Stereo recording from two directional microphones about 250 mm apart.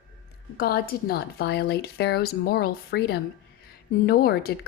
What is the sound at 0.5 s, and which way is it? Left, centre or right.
Speech, left.